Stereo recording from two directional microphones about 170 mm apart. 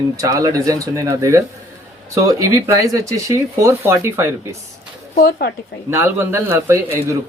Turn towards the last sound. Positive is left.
turn(degrees=-15)  # may be behind; listen again after turning